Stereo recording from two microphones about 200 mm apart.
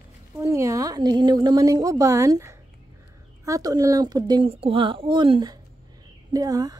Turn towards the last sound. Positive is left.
turn(degrees=-20)  # may be behind; listen again after turning